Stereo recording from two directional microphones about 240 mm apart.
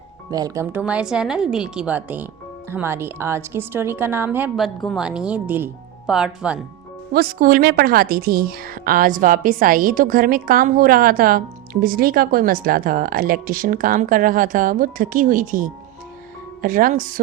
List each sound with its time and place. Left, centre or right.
0.3 s speech: centre
7.1 s a woman's voice: right